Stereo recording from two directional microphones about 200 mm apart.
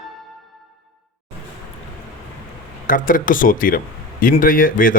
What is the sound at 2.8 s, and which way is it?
Speech, 45° left (ahead or behind).